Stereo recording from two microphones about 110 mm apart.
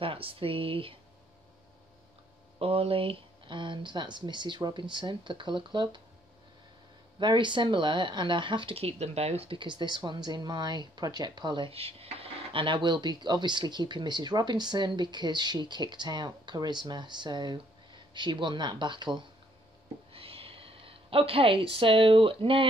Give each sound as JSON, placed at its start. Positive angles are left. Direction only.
{"t": 0.0, "sound": "speech", "side_deg": -55}
{"t": 2.6, "sound": "speech", "side_deg": -60}
{"t": 7.2, "sound": "speech", "side_deg": -45}
{"t": 11.7, "sound": "speech", "side_deg": -60}
{"t": 20.1, "sound": "a woman's voice", "side_deg": -60}